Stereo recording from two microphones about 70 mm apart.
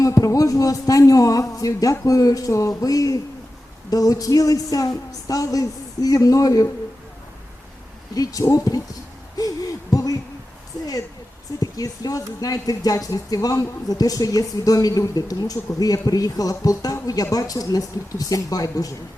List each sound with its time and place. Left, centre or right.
0.0 s speech: left
8.1 s speech: left
9.9 s hoot: left
11.6 s speech: left